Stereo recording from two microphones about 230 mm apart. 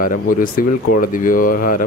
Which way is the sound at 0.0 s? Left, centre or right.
Left.